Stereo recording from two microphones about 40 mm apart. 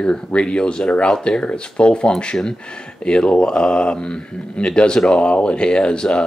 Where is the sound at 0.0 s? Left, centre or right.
Left.